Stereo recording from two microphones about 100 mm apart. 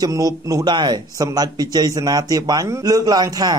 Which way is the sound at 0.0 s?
35° right (ahead or behind).